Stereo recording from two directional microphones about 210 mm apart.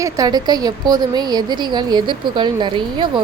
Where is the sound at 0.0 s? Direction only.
20° right (ahead or behind).